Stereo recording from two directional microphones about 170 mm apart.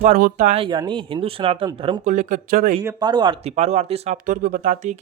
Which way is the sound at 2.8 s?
25° right (ahead or behind).